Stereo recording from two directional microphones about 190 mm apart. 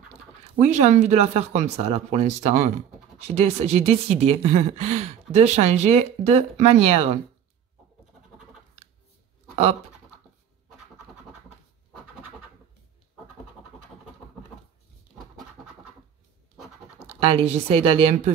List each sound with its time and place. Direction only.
0.6 s speech: 40° right (ahead or behind)
17.2 s speech: 30° right (ahead or behind)